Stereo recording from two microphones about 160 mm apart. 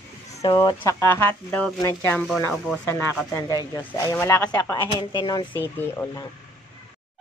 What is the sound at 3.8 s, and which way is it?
Speech, 15° left (ahead or behind).